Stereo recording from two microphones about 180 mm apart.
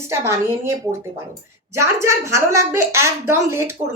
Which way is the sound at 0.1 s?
15° right (ahead or behind).